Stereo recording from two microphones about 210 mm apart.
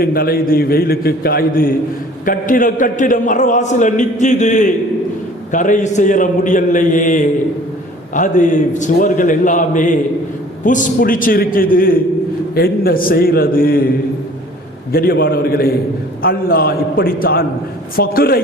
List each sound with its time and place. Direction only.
0.0 s a man's voice: 45° left (ahead or behind)
14.9 s a man's voice: 45° left (ahead or behind)